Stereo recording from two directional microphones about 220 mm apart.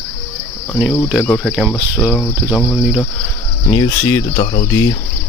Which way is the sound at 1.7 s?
10° left (ahead or behind).